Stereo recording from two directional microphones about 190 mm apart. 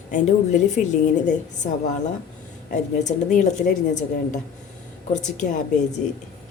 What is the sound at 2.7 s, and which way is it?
A woman's voice, 40° left (ahead or behind).